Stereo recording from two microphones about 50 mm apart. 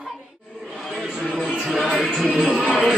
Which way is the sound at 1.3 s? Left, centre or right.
Centre.